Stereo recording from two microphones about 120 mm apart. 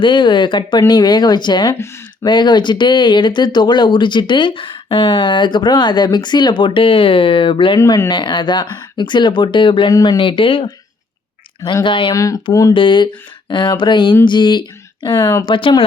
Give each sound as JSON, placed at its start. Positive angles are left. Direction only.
{"t": 0.0, "sound": "speech", "side_deg": 40}
{"t": 1.8, "sound": "speech", "side_deg": 20}
{"t": 2.2, "sound": "speech", "side_deg": 40}
{"t": 7.8, "sound": "speech", "side_deg": 30}
{"t": 12.1, "sound": "speech", "side_deg": 30}
{"t": 12.7, "sound": "speech", "side_deg": 40}